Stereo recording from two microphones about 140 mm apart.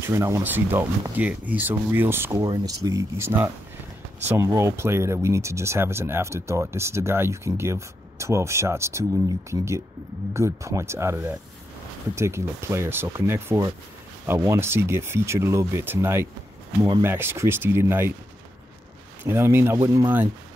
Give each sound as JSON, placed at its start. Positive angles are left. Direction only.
{"t": 0.0, "sound": "speech", "side_deg": -20}
{"t": 10.3, "sound": "speech", "side_deg": -20}
{"t": 19.2, "sound": "speech", "side_deg": -15}